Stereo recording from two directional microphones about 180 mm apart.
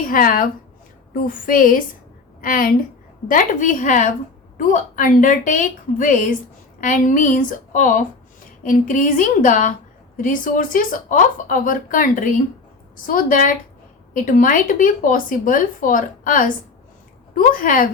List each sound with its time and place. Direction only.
0.1 s speech: 50° left (ahead or behind)